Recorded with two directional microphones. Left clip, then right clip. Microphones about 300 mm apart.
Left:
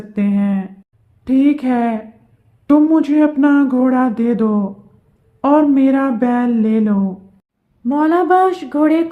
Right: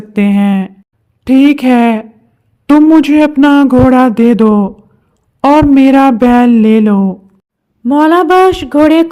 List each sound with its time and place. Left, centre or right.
0.1 s a man's voice: right